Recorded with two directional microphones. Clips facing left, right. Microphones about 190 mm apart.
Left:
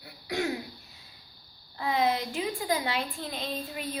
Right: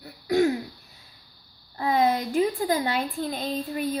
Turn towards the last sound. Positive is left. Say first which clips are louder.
# right 7 dB
turn(degrees=-45)  # may be behind; listen again after turning